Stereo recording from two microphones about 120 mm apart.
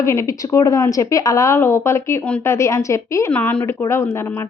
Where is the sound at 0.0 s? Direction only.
25° left (ahead or behind).